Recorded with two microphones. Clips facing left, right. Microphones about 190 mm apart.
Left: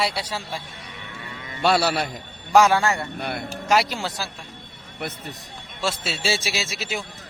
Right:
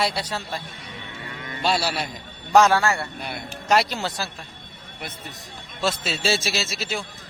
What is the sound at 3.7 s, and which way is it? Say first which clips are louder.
Speech: even; 5° left (ahead or behind).